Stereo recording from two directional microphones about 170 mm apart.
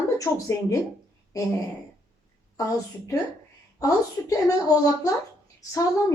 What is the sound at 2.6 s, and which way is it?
Speech, 20° left (ahead or behind).